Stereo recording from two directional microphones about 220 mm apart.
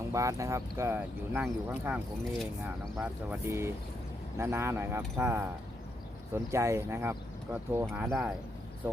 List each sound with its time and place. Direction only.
0.1 s speech: 15° right (ahead or behind)